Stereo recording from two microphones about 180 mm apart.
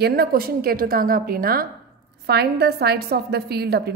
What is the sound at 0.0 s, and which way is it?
A woman's voice, 60° right (ahead or behind).